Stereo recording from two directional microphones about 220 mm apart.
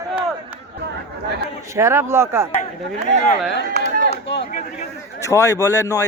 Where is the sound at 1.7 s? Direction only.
10° right (ahead or behind).